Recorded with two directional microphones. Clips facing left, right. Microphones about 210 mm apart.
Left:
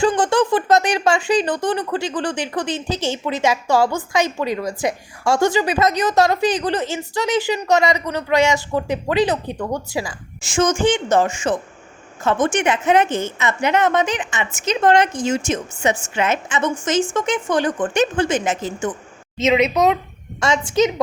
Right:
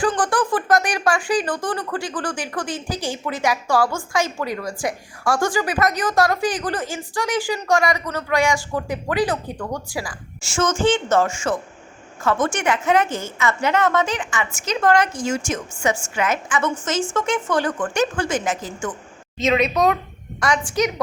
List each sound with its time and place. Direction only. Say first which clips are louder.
0.1 s speech: left 4 dB; 25° left (ahead or behind)